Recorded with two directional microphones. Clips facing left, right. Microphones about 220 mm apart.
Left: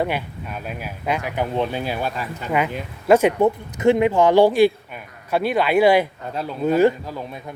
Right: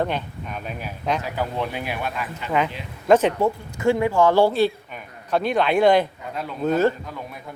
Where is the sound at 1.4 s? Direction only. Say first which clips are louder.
Left 4 dB; 30° left (ahead or behind).